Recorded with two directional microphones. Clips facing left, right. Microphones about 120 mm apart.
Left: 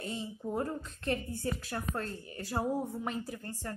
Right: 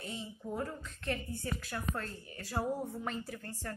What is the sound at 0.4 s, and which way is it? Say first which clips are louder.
A woman's voice: left 4 dB; 30° left (ahead or behind).